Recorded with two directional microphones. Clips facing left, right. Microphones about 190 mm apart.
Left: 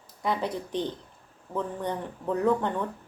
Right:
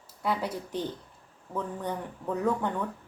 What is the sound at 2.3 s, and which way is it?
Speech, 10° right (ahead or behind).